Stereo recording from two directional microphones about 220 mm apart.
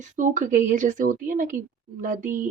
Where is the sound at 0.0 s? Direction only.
35° right (ahead or behind).